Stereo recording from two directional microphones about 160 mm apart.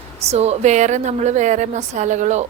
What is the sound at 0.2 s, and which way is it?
A woman's voice, 40° right (ahead or behind).